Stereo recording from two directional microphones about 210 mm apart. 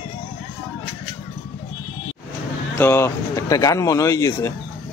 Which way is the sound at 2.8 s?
10° left (ahead or behind).